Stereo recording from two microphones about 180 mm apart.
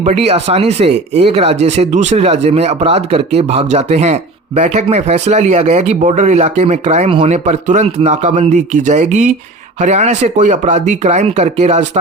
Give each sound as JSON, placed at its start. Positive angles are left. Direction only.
{"t": 0.0, "sound": "speech", "side_deg": -35}